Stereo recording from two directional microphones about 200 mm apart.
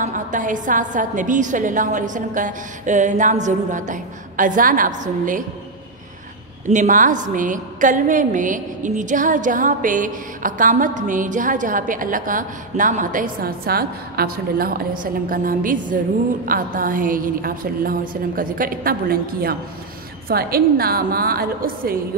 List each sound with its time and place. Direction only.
0.0 s a woman's voice: 40° right (ahead or behind)
6.7 s a woman's voice: 40° right (ahead or behind)